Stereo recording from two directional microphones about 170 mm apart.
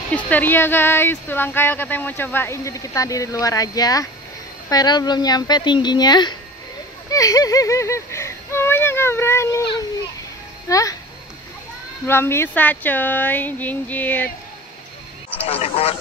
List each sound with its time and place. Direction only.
0.3 s speech: 10° left (ahead or behind)
10.7 s speech: 20° left (ahead or behind)
12.1 s speech: 15° left (ahead or behind)
15.3 s a man's voice: 35° left (ahead or behind)